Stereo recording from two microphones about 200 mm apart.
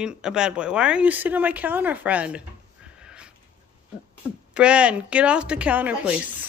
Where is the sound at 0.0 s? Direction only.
5° right (ahead or behind).